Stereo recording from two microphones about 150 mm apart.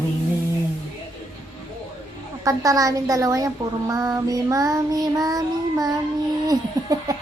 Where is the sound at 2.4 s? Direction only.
25° right (ahead or behind).